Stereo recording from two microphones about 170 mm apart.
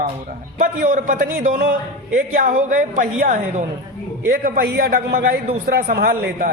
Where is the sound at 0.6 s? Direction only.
50° right (ahead or behind).